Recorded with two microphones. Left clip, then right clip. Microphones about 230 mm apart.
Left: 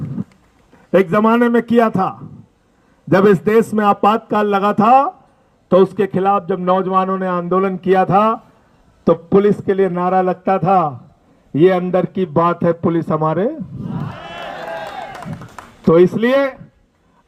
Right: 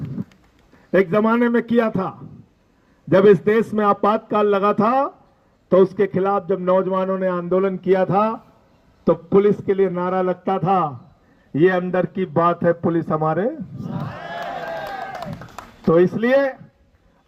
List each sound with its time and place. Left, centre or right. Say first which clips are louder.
0.9 s a man's voice: left 4 dB; left
15.8 s a man's voice: left 5 dB; left